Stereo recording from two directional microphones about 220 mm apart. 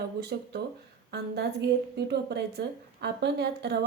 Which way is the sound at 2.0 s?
50° right (ahead or behind).